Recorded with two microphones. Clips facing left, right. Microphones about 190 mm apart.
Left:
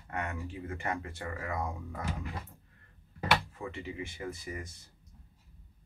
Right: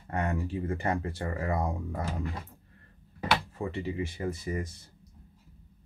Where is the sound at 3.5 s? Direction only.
35° right (ahead or behind).